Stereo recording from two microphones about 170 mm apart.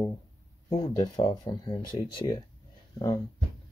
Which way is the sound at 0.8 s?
25° left (ahead or behind).